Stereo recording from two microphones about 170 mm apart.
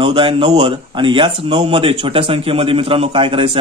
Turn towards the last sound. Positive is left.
turn(degrees=-30)  # may be behind; listen again after turning